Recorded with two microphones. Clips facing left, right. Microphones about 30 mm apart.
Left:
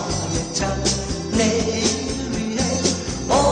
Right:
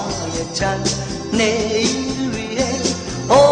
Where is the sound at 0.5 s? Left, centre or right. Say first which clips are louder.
Right 5 dB; right.